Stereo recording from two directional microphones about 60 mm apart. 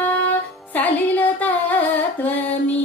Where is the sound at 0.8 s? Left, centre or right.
Left.